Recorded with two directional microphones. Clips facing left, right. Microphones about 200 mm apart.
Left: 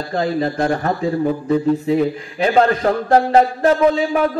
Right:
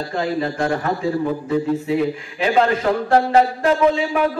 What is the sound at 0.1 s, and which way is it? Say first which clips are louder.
A man's voice: left 4 dB; 35° left (ahead or behind).